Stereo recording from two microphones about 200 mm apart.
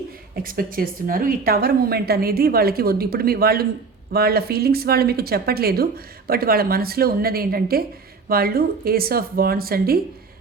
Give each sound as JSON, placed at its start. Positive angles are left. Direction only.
{"t": 0.4, "sound": "speech", "side_deg": -45}